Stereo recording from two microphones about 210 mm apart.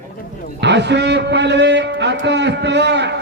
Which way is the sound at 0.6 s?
55° right (ahead or behind).